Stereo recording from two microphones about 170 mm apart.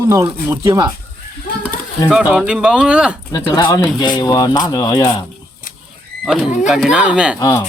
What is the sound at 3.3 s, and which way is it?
Speech, 30° left (ahead or behind).